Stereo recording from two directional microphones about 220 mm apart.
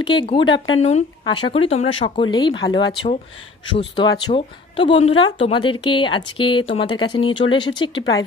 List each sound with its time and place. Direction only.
0.0 s speech: 20° left (ahead or behind)